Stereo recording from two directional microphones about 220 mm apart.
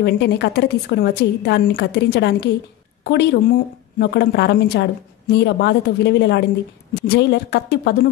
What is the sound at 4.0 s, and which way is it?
A woman's voice, 50° left (ahead or behind).